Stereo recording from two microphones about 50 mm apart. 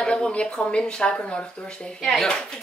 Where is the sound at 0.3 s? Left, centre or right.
Left.